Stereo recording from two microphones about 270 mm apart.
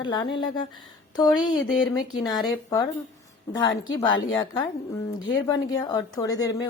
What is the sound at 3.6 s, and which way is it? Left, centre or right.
A woman's voice, centre.